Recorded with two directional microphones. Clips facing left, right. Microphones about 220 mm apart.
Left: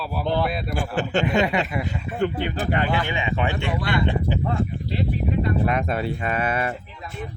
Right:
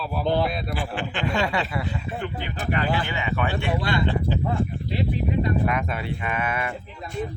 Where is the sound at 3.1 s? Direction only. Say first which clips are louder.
Left 1 dB; 20° left (ahead or behind).